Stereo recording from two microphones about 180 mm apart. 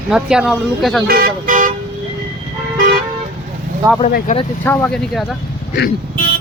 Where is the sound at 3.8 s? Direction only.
20° right (ahead or behind).